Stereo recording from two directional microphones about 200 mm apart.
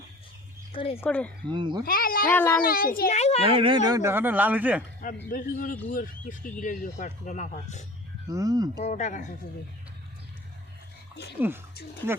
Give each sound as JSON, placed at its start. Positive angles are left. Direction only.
{"t": 0.7, "sound": "speech", "side_deg": 25}
{"t": 1.0, "sound": "speech", "side_deg": 5}
{"t": 1.5, "sound": "speech", "side_deg": -20}
{"t": 1.8, "sound": "a child's voice", "side_deg": 45}
{"t": 2.2, "sound": "speech", "side_deg": 10}
{"t": 2.6, "sound": "a child's voice", "side_deg": 45}
{"t": 3.4, "sound": "speech", "side_deg": -25}
{"t": 5.3, "sound": "a child's voice", "side_deg": 45}
{"t": 8.3, "sound": "speech", "side_deg": -15}
{"t": 8.8, "sound": "speech", "side_deg": 35}
{"t": 11.3, "sound": "speech", "side_deg": -10}